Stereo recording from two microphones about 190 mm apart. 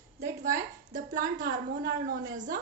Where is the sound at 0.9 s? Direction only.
40° right (ahead or behind).